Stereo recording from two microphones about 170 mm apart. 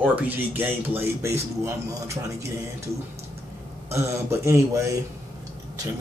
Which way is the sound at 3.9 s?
15° right (ahead or behind).